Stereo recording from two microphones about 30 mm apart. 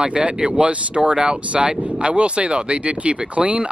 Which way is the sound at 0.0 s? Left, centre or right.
Right.